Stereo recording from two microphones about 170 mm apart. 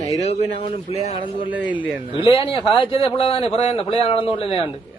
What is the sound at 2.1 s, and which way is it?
A man's voice, 30° left (ahead or behind).